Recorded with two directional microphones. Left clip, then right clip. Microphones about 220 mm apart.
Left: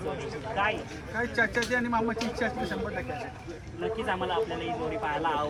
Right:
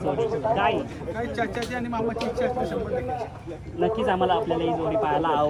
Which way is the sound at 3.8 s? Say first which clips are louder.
Right 8 dB; 45° right (ahead or behind).